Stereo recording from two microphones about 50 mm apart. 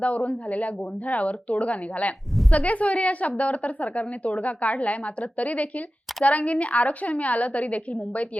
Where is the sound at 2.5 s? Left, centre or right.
Left.